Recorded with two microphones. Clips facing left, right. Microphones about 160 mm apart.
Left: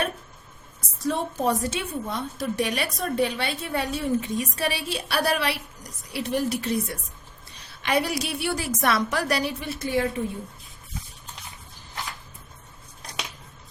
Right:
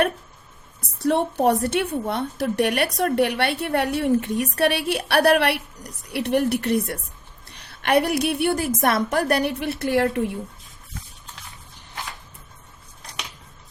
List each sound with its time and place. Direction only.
0.8 s a woman's voice: 65° right (ahead or behind)